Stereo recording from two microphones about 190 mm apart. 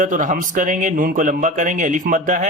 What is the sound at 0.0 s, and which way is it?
A man's voice, 40° right (ahead or behind).